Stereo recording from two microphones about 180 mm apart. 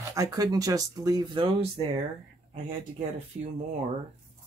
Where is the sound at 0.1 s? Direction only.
20° right (ahead or behind).